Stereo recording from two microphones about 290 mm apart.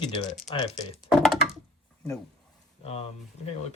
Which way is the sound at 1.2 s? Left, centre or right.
Centre.